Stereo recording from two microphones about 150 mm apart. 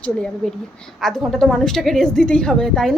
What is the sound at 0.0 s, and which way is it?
A woman's voice, 5° left (ahead or behind).